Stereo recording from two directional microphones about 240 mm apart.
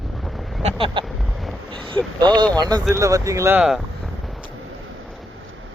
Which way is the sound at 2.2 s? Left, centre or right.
Centre.